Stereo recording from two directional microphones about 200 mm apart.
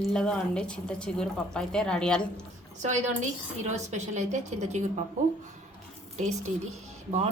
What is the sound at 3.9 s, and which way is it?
Speech, 35° right (ahead or behind).